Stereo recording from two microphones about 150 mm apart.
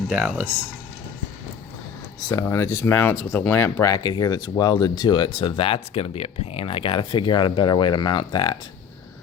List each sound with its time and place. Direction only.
0.1 s speech: 5° right (ahead or behind)
2.3 s speech: 20° left (ahead or behind)